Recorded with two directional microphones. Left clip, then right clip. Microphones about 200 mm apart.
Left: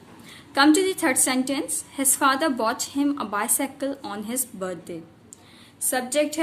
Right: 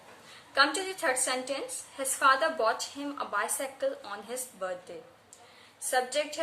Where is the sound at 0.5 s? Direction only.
55° left (ahead or behind).